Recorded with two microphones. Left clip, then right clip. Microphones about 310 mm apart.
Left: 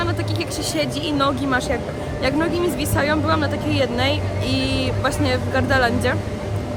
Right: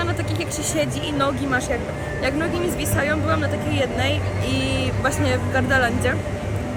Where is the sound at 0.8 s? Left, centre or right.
Centre.